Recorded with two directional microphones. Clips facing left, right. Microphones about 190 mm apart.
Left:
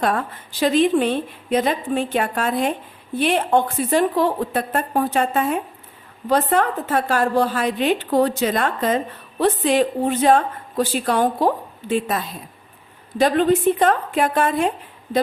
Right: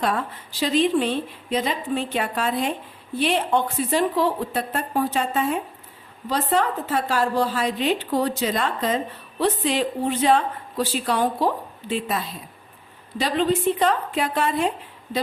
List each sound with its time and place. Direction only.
0.6 s a woman's voice: 55° left (ahead or behind)